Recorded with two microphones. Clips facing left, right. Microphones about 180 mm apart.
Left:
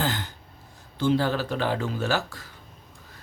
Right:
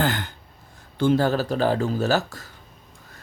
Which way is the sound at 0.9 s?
50° right (ahead or behind).